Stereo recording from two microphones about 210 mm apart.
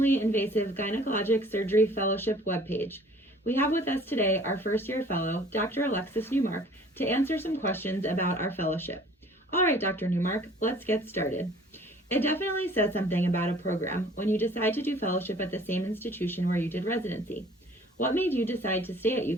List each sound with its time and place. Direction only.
0.0 s speech: 10° left (ahead or behind)